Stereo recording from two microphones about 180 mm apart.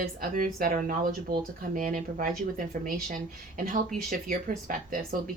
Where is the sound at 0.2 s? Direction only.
50° right (ahead or behind).